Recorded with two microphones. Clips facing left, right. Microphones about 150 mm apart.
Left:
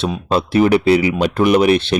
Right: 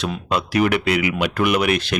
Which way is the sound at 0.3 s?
30° left (ahead or behind).